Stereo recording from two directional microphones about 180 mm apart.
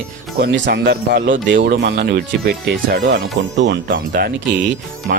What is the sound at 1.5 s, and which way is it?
Speech, 65° right (ahead or behind).